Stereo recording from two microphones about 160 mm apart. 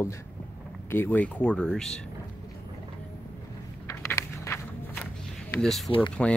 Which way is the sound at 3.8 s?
20° left (ahead or behind).